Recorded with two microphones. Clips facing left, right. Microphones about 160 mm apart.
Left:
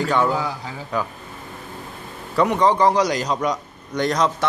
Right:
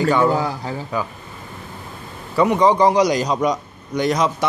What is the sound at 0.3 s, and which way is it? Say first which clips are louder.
Speech: right 4 dB; 45° right (ahead or behind).